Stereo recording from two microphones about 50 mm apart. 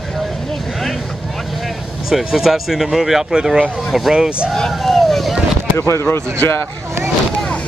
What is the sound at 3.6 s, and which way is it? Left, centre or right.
Speech, centre.